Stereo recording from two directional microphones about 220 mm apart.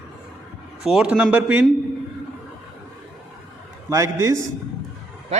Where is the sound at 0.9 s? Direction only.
5° right (ahead or behind).